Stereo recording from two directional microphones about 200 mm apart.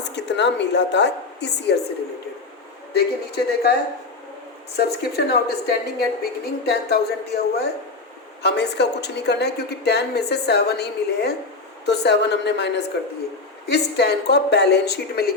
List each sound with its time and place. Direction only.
0.0 s a woman's voice: 60° left (ahead or behind)
2.9 s a woman's voice: 55° left (ahead or behind)
4.8 s a woman's voice: 55° left (ahead or behind)